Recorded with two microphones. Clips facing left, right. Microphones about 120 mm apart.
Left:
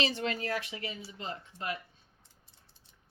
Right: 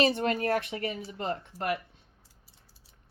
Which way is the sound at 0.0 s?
50° right (ahead or behind).